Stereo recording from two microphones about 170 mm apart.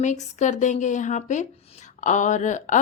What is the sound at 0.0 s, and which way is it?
A woman's voice, 45° left (ahead or behind).